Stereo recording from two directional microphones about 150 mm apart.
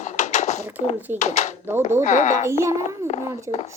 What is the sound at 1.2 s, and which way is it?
A child's voice, 50° left (ahead or behind).